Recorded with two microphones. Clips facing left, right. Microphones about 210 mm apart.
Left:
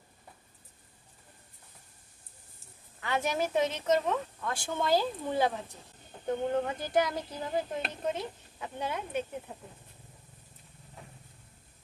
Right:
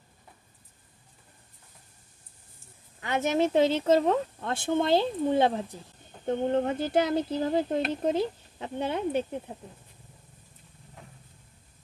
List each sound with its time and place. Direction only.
3.0 s speech: 20° right (ahead or behind)
4.6 s speech: 25° right (ahead or behind)